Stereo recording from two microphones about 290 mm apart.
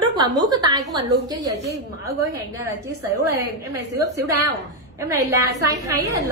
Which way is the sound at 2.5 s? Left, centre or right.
Centre.